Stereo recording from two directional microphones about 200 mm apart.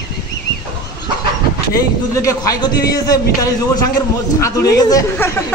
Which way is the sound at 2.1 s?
15° left (ahead or behind).